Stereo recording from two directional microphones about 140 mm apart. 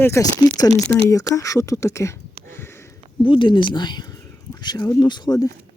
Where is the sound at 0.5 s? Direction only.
25° left (ahead or behind).